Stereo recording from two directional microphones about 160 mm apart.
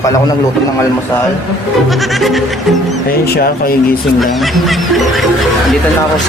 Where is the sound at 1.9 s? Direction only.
Centre (ahead or behind).